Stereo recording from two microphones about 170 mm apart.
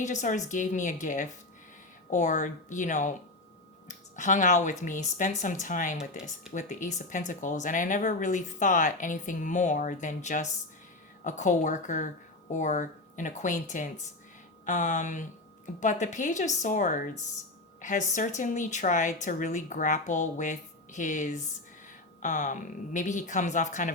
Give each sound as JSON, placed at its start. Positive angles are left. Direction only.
{"t": 0.0, "sound": "speech", "side_deg": 45}